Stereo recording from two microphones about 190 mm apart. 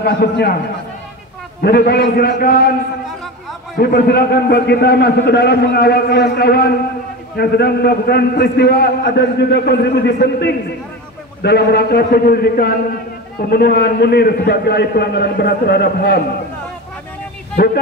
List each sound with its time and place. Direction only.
0.0 s a man's voice: 60° left (ahead or behind)
1.6 s a man's voice: 55° left (ahead or behind)
11.4 s a man's voice: 60° left (ahead or behind)